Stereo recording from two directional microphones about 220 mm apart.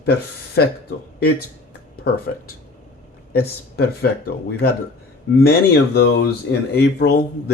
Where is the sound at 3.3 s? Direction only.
45° left (ahead or behind).